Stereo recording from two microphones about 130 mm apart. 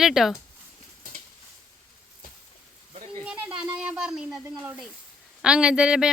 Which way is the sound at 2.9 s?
60° right (ahead or behind).